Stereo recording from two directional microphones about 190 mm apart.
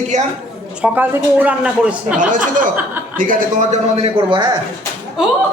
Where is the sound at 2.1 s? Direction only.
40° right (ahead or behind); by 4.5 s 25° right (ahead or behind).